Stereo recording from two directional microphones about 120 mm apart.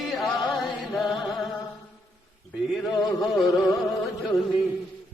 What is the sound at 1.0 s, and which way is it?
Music, centre (ahead or behind).